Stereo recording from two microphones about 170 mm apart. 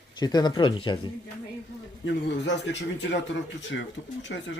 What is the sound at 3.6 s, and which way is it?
Speech, 90° left.